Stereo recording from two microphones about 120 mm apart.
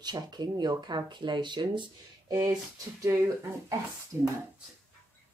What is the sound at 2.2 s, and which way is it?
Speech, 25° right (ahead or behind).